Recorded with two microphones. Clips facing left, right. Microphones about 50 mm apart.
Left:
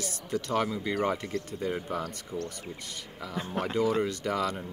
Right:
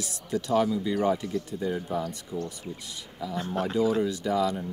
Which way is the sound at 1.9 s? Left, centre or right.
Left.